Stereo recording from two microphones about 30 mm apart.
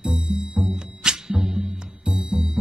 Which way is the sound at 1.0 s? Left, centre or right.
Right.